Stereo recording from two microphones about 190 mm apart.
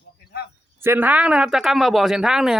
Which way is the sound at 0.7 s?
10° right (ahead or behind).